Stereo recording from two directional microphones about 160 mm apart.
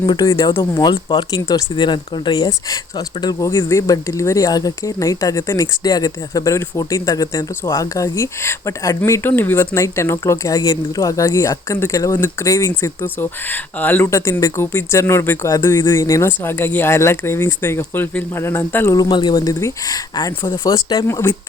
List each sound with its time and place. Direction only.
0.0 s speech: 25° left (ahead or behind)
18.9 s speech: 30° left (ahead or behind)